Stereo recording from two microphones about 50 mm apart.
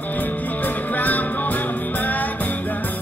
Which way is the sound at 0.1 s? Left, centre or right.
Left.